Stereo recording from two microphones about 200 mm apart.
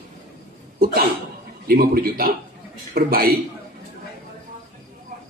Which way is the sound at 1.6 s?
50° right (ahead or behind).